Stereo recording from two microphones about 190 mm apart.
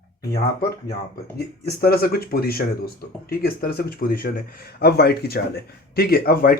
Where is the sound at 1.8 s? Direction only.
55° left (ahead or behind).